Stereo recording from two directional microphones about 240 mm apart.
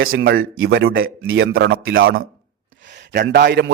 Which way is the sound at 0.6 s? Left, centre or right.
Right.